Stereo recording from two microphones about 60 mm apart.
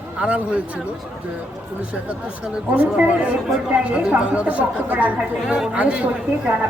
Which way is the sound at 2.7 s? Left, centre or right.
Right.